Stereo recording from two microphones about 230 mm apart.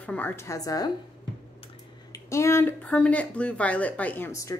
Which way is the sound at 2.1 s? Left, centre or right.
Centre.